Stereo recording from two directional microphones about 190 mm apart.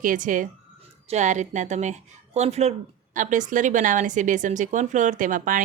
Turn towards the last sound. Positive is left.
turn(degrees=-45)  # may be behind; listen again after turning